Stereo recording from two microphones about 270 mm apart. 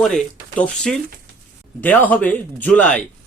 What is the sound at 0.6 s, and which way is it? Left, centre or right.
Speech, centre.